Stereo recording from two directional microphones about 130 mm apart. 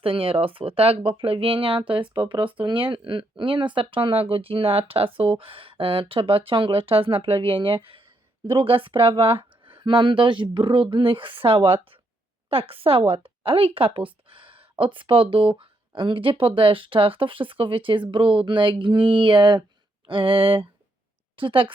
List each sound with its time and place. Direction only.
0.0 s speech: 45° right (ahead or behind)